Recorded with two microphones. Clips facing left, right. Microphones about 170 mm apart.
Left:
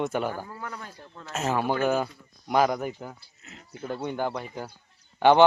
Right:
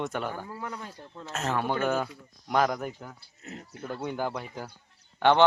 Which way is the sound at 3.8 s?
Centre (ahead or behind).